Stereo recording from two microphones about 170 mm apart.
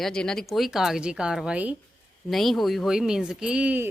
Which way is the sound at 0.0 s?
5° left (ahead or behind).